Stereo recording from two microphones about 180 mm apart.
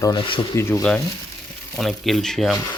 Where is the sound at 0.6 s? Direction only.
15° left (ahead or behind).